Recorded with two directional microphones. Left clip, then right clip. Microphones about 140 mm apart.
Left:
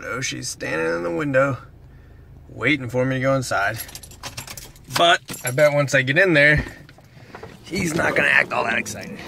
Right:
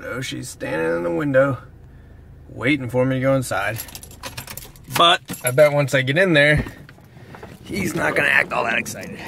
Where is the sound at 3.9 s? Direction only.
50° right (ahead or behind).